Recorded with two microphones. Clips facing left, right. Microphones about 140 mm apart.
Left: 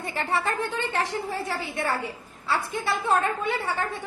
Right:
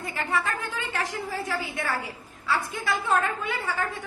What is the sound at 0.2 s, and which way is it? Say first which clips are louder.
A woman's voice: left 2 dB; 35° left (ahead or behind).